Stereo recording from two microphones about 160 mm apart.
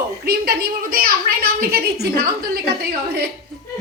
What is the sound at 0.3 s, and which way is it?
A woman's voice, 70° right (ahead or behind).